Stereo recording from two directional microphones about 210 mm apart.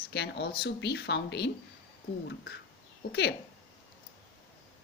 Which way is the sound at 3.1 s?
50° left (ahead or behind).